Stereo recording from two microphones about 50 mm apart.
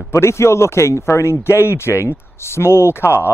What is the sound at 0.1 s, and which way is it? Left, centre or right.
Speech, left.